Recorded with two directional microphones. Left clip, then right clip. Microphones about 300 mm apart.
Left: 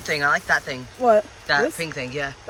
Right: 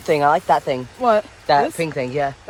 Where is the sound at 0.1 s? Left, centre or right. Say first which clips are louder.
Right 5 dB; centre.